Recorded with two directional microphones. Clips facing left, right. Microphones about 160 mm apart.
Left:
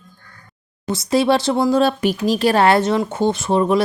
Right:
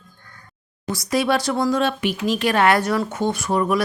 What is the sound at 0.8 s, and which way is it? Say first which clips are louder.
Speech: left 4 dB; 25° left (ahead or behind).